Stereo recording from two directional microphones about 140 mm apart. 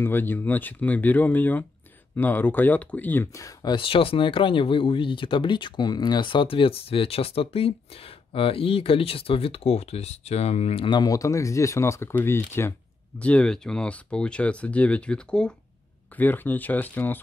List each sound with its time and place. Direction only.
0.0 s speech: 15° left (ahead or behind)
3.7 s speech: 40° left (ahead or behind); by 17.2 s 15° left (ahead or behind)